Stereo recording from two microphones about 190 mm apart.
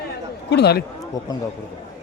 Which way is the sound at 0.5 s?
60° left (ahead or behind).